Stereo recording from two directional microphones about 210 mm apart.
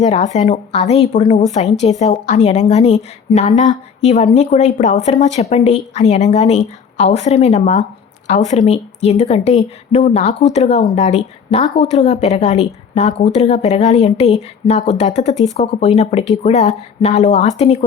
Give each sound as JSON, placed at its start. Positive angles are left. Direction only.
{"t": 0.0, "sound": "a woman's voice", "side_deg": 30}